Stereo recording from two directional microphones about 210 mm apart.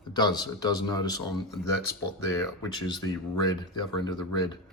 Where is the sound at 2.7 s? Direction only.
20° left (ahead or behind).